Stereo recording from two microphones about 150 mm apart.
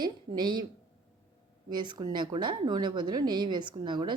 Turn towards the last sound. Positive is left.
turn(degrees=-30)  # may be behind; listen again after turning